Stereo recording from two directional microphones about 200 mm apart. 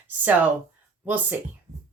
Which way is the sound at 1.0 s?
10° right (ahead or behind).